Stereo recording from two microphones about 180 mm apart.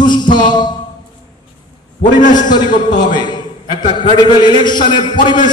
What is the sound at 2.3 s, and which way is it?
A man's voice, 25° left (ahead or behind).